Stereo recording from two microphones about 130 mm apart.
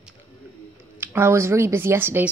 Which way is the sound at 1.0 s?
20° right (ahead or behind).